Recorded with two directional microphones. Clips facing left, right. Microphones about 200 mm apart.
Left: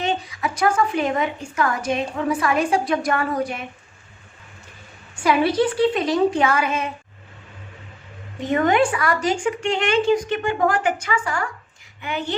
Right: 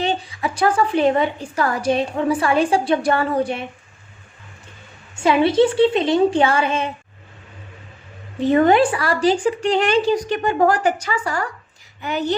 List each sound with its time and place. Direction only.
0.0 s a woman's voice: 30° right (ahead or behind)
5.1 s a woman's voice: 25° right (ahead or behind)
8.4 s a woman's voice: 35° right (ahead or behind)